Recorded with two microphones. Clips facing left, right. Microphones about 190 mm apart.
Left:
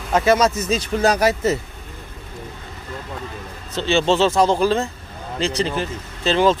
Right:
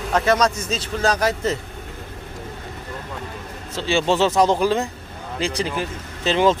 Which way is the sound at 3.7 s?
10° right (ahead or behind).